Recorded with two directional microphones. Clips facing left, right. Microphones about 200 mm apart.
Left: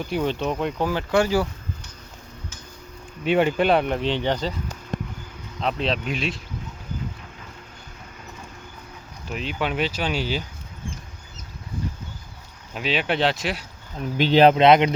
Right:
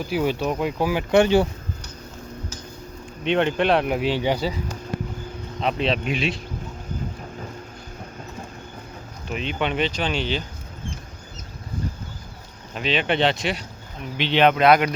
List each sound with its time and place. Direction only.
0.0 s speech: 5° right (ahead or behind)
1.1 s speech: 25° right (ahead or behind)
3.2 s speech: 5° left (ahead or behind)
5.6 s speech: centre (ahead or behind)
9.3 s speech: 5° left (ahead or behind)
12.7 s speech: 5° left (ahead or behind)
14.2 s speech: 40° left (ahead or behind)
14.5 s speech: 25° left (ahead or behind)